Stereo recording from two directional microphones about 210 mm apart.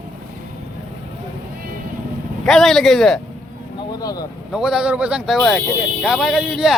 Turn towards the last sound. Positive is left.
turn(degrees=0)  # may be behind; listen again after turning